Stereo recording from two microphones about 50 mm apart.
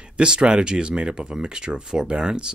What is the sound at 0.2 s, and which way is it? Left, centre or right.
Speech, centre.